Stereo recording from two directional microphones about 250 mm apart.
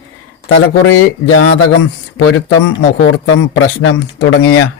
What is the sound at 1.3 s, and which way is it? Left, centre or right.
Speech, left.